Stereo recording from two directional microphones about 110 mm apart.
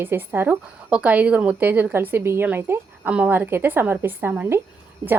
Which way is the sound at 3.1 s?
10° right (ahead or behind).